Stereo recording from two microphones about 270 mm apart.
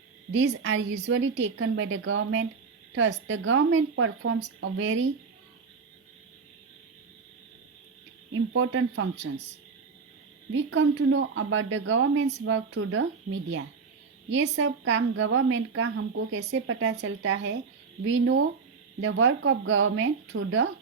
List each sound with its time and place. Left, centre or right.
0.3 s a woman's voice: right
8.3 s a woman's voice: right
10.5 s a woman's voice: right
14.3 s a woman's voice: right